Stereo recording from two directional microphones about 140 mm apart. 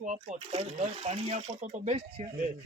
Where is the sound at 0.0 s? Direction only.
60° right (ahead or behind).